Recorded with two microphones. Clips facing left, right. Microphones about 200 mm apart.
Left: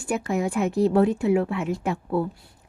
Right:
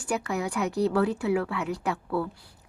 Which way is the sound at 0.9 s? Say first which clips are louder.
Left 5 dB; 20° left (ahead or behind).